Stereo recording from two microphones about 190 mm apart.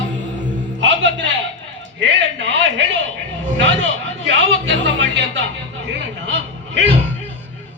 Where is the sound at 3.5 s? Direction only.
70° right (ahead or behind).